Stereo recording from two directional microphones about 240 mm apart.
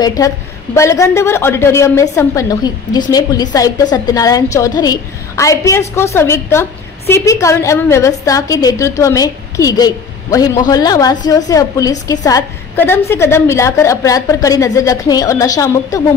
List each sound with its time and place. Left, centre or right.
0.0 s a woman's voice: centre